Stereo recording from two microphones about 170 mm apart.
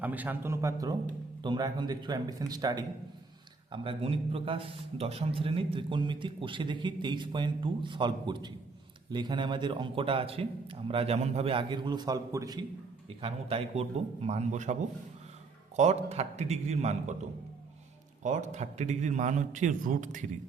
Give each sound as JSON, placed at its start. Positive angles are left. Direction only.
{"t": 0.0, "sound": "a man's voice", "side_deg": -10}
{"t": 13.1, "sound": "a man's voice", "side_deg": -35}
{"t": 18.2, "sound": "a man's voice", "side_deg": -45}